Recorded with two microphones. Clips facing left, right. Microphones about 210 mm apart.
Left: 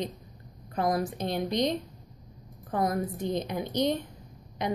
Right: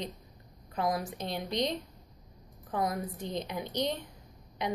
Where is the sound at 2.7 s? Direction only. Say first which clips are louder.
Left 4 dB; 50° left (ahead or behind).